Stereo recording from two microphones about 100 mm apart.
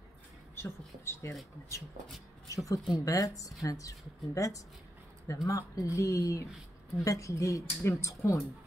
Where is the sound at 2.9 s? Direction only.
35° left (ahead or behind).